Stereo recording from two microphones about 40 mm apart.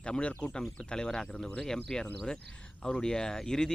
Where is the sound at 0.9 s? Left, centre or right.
Centre.